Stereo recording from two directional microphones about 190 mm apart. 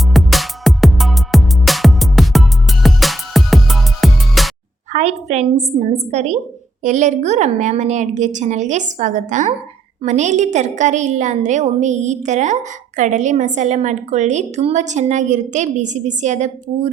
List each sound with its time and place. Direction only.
0.1 s music: centre (ahead or behind)
4.9 s a woman's voice: 35° right (ahead or behind)